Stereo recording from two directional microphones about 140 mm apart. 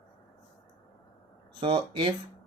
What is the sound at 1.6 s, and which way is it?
Speech, 35° right (ahead or behind).